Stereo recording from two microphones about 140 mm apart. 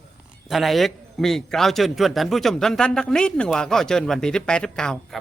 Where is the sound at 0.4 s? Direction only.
Centre (ahead or behind).